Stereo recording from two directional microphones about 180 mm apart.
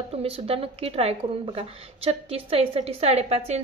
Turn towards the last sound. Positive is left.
turn(degrees=-35)  # may be behind; listen again after turning